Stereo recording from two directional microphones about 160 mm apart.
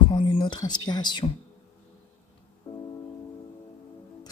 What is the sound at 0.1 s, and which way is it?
Speech, 30° left (ahead or behind).